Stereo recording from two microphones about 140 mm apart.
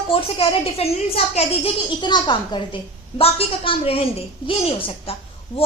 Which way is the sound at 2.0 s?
30° left (ahead or behind).